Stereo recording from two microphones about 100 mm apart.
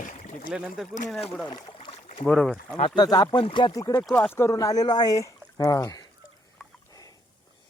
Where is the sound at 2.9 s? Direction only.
45° left (ahead or behind).